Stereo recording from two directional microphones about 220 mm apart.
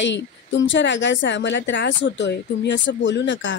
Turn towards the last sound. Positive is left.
turn(degrees=55)  # may be behind; listen again after turning